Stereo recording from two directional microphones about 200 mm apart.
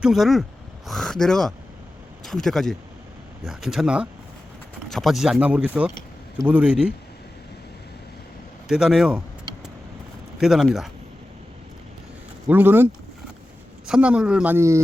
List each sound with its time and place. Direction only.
0.0 s speech: centre (ahead or behind)
8.6 s speech: centre (ahead or behind)
10.4 s speech: centre (ahead or behind)
12.5 s speech: 10° right (ahead or behind)